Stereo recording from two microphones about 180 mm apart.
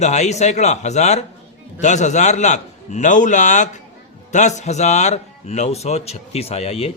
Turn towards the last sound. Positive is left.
turn(degrees=35)  # may be behind; listen again after turning